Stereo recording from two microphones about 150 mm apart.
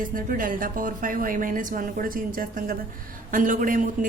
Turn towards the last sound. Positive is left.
turn(degrees=-65)  # may be behind; listen again after turning